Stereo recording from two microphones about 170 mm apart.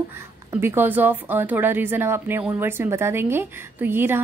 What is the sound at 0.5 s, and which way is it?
Speech, 15° right (ahead or behind).